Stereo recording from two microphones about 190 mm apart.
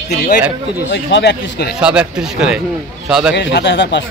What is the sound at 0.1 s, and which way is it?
Speech, 55° left (ahead or behind).